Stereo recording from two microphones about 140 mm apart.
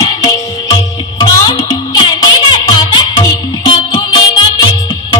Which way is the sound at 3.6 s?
30° left (ahead or behind).